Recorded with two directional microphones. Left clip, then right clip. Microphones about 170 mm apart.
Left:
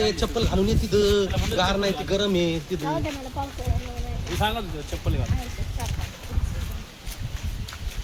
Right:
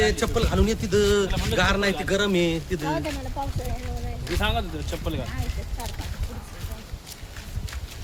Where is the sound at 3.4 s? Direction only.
10° left (ahead or behind).